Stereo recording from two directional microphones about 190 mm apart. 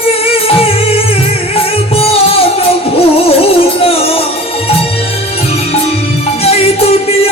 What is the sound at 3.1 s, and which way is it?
Music, 30° left (ahead or behind).